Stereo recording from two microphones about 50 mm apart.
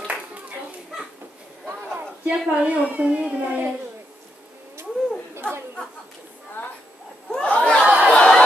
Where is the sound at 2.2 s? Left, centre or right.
Right.